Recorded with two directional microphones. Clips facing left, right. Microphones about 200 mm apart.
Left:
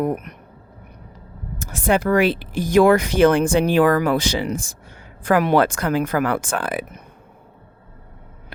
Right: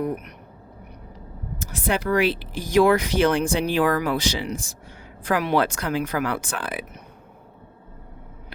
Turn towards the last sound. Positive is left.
turn(degrees=50)  # may be behind; listen again after turning